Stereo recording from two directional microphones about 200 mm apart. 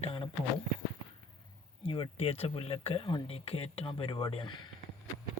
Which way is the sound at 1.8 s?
25° left (ahead or behind).